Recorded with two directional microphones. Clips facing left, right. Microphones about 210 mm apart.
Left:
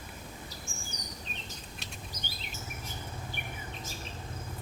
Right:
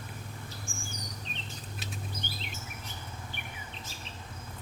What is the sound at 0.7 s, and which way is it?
Bird vocalization, 40° left (ahead or behind).